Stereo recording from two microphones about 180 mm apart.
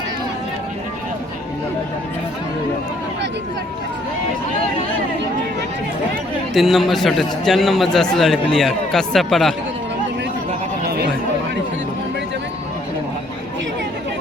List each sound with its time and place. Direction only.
6.5 s a man's voice: centre (ahead or behind)
10.8 s chatter: 60° right (ahead or behind)